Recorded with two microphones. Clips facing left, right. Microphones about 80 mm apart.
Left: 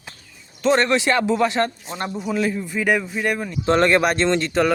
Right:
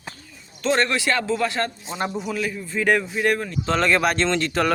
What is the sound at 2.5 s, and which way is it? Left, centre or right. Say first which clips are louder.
Speech: even; centre.